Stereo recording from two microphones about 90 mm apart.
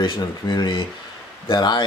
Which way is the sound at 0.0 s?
55° left (ahead or behind).